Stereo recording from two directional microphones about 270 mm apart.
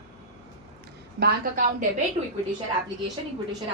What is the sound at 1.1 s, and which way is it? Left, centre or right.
Speech, right.